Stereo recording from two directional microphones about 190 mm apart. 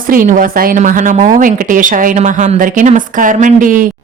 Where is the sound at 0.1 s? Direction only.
45° right (ahead or behind).